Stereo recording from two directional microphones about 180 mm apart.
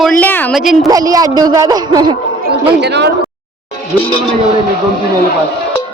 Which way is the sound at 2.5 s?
70° right (ahead or behind).